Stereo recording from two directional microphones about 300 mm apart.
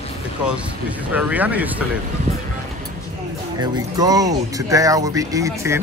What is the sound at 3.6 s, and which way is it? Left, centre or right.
Speech, centre.